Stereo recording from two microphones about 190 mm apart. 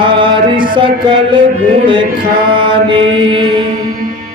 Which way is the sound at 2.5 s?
25° right (ahead or behind).